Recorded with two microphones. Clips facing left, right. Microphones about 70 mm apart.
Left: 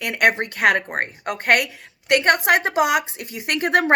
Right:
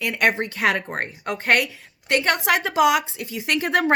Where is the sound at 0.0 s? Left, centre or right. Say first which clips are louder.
Left 2 dB; left.